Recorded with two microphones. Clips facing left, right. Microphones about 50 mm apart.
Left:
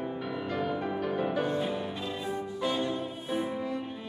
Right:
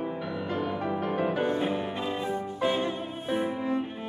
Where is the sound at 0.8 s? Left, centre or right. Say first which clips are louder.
Right 2 dB; right.